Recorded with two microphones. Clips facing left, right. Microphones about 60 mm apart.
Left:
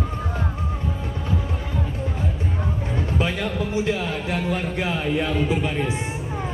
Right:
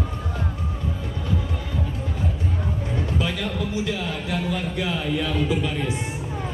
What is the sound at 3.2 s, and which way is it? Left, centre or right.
Speech, left.